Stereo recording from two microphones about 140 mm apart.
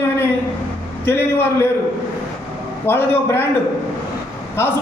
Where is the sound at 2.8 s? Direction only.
15° left (ahead or behind).